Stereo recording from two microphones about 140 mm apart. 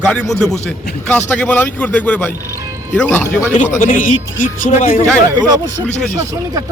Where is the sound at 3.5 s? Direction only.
60° left (ahead or behind).